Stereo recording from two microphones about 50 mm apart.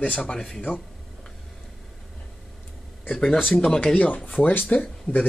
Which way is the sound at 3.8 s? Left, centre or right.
Left.